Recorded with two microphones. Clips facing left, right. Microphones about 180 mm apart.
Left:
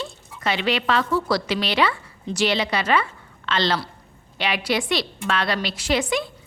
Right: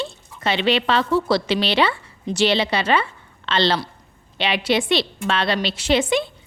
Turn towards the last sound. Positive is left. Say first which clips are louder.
# right 4 dB
turn(degrees=-25)  # may be behind; listen again after turning